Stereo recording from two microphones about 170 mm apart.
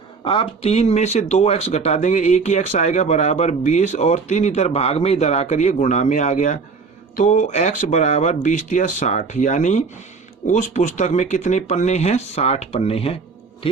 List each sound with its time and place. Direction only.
0.3 s speech: 35° left (ahead or behind)